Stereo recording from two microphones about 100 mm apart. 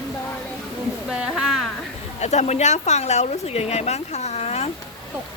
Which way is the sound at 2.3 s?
90° left.